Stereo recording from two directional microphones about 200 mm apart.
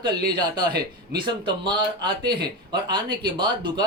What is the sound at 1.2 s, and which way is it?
Speech, 25° right (ahead or behind).